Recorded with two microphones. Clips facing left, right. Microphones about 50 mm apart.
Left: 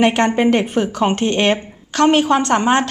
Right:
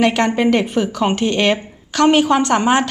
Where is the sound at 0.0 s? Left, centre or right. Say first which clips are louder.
Left 1 dB; left.